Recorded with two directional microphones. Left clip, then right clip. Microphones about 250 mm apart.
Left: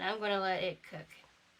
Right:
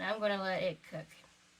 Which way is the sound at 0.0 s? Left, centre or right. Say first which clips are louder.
Left 1 dB; centre.